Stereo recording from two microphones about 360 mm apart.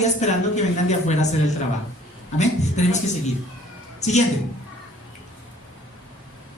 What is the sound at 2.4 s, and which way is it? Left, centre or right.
Speech, centre.